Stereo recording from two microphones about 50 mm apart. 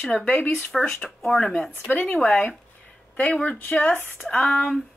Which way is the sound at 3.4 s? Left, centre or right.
Left.